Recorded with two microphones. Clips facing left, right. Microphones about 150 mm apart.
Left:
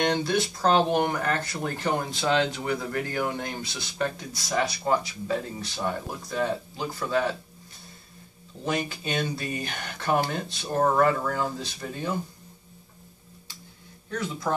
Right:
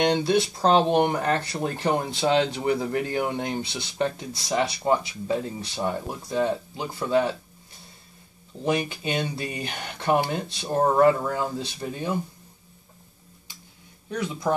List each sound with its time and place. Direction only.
0.0 s speech: 25° right (ahead or behind)
8.6 s speech: 20° right (ahead or behind)
14.0 s speech: 15° right (ahead or behind)